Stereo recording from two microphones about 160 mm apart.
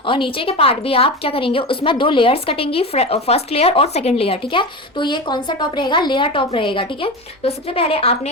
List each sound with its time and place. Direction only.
0.0 s speech: 30° left (ahead or behind)